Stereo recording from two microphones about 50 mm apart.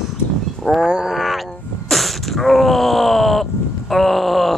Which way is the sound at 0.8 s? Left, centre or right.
Centre.